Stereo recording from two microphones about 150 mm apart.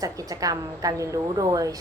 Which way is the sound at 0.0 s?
25° right (ahead or behind).